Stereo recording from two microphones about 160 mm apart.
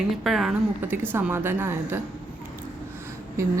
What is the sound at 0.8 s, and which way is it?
Speech, 15° right (ahead or behind).